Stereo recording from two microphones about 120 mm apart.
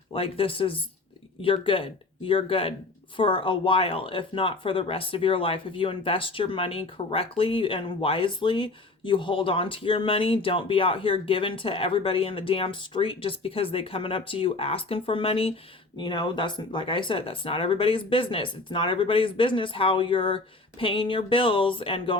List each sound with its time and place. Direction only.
0.1 s speech: 50° left (ahead or behind)
16.0 s speech: 40° left (ahead or behind)